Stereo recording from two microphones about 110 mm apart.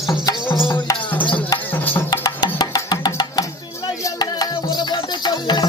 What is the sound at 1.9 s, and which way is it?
Music, 20° left (ahead or behind).